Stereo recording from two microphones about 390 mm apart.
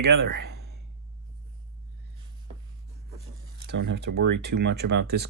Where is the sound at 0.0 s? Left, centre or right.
Right.